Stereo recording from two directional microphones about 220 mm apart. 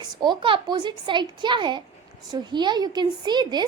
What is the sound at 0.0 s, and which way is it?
A woman's voice, 20° right (ahead or behind).